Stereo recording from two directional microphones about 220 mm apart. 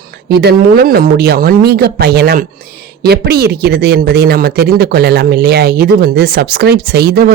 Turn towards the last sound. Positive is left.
turn(degrees=-45)  # may be behind; listen again after turning